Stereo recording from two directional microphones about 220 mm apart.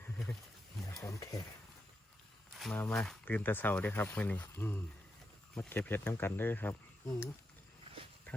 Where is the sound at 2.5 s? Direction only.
5° left (ahead or behind).